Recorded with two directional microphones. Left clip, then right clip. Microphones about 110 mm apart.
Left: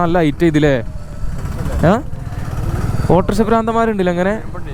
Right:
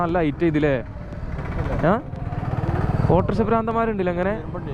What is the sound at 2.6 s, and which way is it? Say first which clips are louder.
Vehicle: left 1 dB; 30° left (ahead or behind).